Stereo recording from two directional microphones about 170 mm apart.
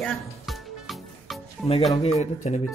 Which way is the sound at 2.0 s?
40° left (ahead or behind).